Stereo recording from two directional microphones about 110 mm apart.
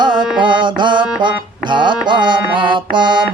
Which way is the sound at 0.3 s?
45° right (ahead or behind).